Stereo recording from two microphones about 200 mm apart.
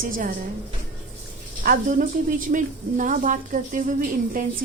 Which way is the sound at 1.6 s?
45° right (ahead or behind).